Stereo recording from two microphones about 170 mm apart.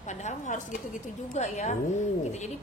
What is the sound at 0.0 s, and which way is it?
A woman's voice, 45° left (ahead or behind).